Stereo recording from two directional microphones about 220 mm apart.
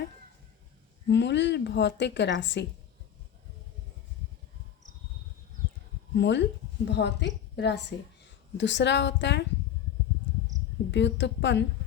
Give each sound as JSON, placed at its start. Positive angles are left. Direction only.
{"t": 1.0, "sound": "a woman's voice", "side_deg": 50}
{"t": 6.1, "sound": "a woman's voice", "side_deg": 55}
{"t": 10.9, "sound": "a woman's voice", "side_deg": 55}